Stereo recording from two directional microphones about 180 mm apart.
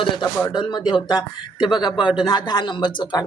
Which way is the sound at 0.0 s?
25° left (ahead or behind).